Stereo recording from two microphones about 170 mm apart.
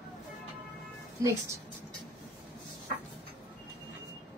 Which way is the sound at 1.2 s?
20° right (ahead or behind).